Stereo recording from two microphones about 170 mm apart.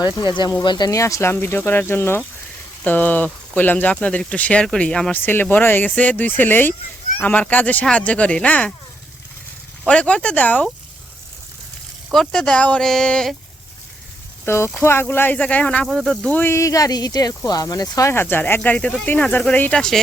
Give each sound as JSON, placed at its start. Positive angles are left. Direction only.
{"t": 0.0, "sound": "speech", "side_deg": 25}
{"t": 9.8, "sound": "speech", "side_deg": 5}
{"t": 12.1, "sound": "speech", "side_deg": 5}
{"t": 14.4, "sound": "speech", "side_deg": 15}